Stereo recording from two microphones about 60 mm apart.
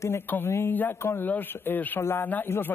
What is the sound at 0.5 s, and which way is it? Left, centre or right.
Speech, left.